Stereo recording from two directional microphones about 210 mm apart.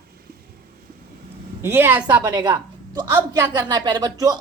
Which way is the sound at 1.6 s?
10° right (ahead or behind).